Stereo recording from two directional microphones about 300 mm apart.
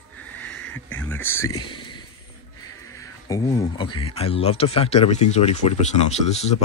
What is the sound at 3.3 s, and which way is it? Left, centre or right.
Speech, centre.